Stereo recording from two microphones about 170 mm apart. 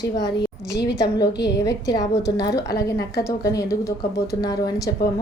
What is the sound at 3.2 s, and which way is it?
A woman's voice, 20° left (ahead or behind).